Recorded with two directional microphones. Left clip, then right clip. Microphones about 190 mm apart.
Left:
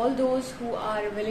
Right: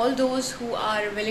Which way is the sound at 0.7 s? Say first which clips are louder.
Right 3 dB; centre (ahead or behind).